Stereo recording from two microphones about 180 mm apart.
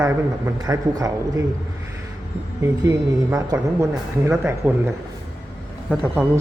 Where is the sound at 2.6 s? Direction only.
15° right (ahead or behind).